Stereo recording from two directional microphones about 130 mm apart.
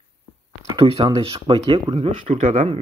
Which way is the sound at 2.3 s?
80° right.